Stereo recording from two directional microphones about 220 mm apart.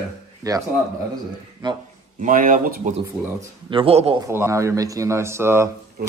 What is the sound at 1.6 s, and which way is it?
Speech, 20° right (ahead or behind).